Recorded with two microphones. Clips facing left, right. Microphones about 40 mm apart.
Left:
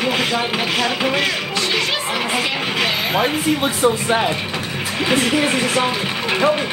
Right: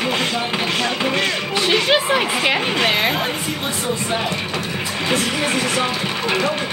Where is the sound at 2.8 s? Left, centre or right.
Centre.